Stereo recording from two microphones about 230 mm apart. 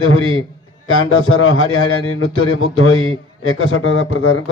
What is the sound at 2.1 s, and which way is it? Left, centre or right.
A man's voice, left.